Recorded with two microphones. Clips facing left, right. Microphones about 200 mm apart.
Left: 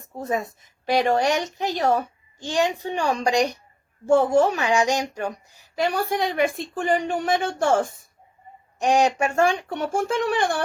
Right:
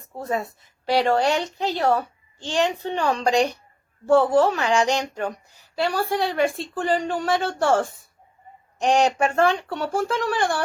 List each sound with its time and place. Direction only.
0.2 s speech: 15° left (ahead or behind)